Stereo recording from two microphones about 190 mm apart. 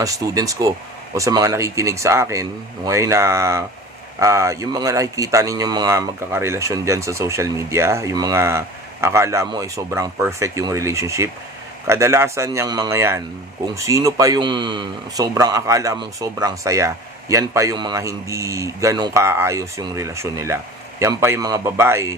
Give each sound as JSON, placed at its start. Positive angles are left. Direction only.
{"t": 0.0, "sound": "speech", "side_deg": -20}